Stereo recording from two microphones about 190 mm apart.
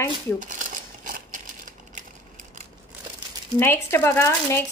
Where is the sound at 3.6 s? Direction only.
10° left (ahead or behind).